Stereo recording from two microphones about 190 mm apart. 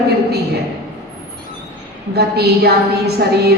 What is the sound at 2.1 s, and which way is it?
Speech, 55° right (ahead or behind).